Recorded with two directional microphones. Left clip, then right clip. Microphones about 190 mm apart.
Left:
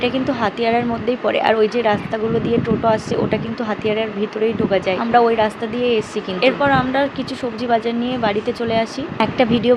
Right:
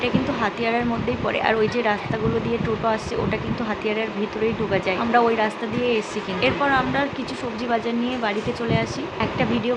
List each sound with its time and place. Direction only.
0.0 s speech: 20° left (ahead or behind)